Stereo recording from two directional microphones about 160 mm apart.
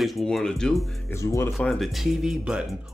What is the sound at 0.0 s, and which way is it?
Speech, centre (ahead or behind).